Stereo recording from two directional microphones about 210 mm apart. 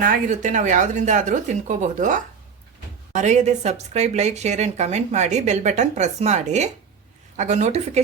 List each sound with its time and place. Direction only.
0.0 s a woman's voice: 40° right (ahead or behind)